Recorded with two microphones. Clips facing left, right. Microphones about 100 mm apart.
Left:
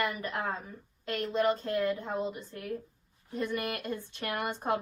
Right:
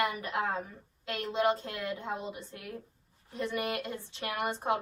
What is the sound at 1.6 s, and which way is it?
Speech, 40° left (ahead or behind).